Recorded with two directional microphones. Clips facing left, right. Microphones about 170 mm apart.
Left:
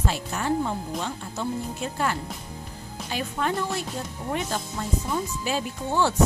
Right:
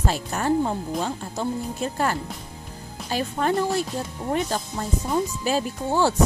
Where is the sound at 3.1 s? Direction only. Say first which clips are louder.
Right 4 dB; 40° right (ahead or behind).